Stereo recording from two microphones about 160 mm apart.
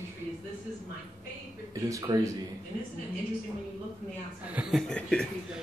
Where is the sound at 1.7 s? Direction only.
20° right (ahead or behind).